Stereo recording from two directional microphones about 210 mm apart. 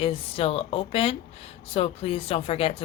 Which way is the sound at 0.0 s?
25° left (ahead or behind).